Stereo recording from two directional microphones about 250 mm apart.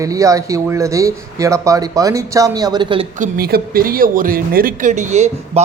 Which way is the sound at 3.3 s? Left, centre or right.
Right.